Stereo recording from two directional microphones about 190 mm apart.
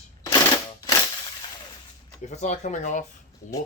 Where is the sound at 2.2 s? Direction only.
35° left (ahead or behind).